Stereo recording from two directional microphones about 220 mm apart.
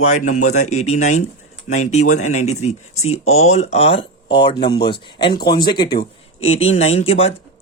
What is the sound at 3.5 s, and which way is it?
Speech, 30° left (ahead or behind).